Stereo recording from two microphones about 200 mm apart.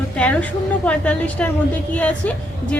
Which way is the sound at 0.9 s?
5° left (ahead or behind).